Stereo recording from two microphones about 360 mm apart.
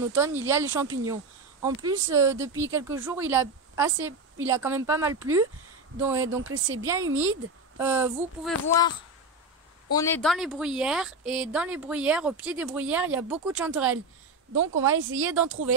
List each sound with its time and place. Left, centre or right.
0.0 s speech: centre
7.1 s speech: right
7.7 s a woman's voice: centre
8.6 s a woman's voice: centre
9.9 s a woman's voice: centre
15.0 s speech: right